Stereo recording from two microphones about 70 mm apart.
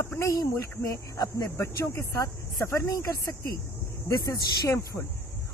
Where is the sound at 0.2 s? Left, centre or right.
Left.